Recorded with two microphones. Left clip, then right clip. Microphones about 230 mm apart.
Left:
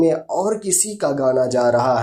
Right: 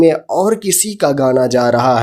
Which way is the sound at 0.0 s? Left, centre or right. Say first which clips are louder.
Right 6 dB; right.